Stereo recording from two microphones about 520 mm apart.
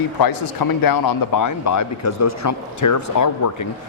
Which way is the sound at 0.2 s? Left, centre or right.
Left.